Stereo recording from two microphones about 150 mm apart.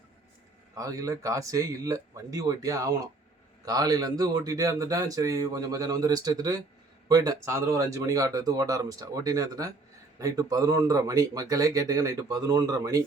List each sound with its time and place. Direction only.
0.8 s speech: 20° right (ahead or behind)